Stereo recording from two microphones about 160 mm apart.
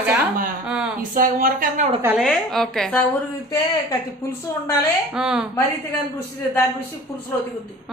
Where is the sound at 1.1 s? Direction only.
60° right (ahead or behind).